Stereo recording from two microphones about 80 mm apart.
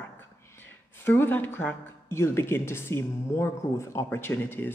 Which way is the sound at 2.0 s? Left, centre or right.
Left.